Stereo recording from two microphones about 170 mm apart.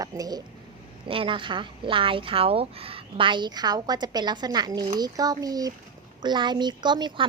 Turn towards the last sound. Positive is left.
turn(degrees=-25)  # may be behind; listen again after turning